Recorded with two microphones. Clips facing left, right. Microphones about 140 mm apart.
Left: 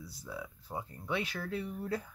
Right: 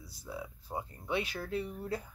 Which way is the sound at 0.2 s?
20° right (ahead or behind).